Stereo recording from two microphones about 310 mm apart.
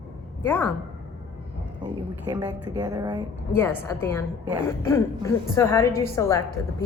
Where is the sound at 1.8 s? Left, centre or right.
Centre.